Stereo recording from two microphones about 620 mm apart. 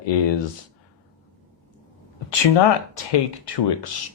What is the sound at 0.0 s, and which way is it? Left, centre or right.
Speech, left.